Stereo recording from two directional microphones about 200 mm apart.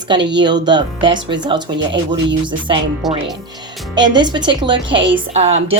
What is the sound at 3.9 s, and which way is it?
Speech, 20° right (ahead or behind).